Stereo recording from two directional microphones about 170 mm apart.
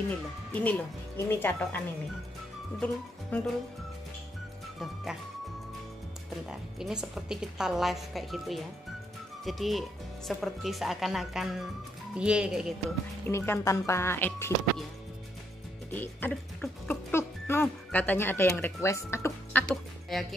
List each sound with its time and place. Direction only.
0.5 s speech: 10° left (ahead or behind)
2.8 s speech: 10° left (ahead or behind)
6.8 s speech: 5° right (ahead or behind)
13.3 s speech: 15° left (ahead or behind)
15.9 s speech: 10° left (ahead or behind)
19.7 s a woman's voice: centre (ahead or behind)